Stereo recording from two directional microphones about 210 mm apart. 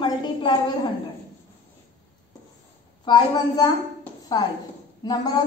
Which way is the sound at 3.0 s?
20° left (ahead or behind).